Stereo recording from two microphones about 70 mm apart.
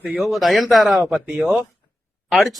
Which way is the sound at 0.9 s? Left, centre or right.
Centre.